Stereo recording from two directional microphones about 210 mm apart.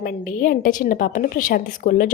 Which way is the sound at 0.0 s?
40° left (ahead or behind).